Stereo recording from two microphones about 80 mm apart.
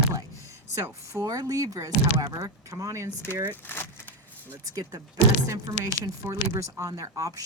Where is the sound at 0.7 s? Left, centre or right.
Right.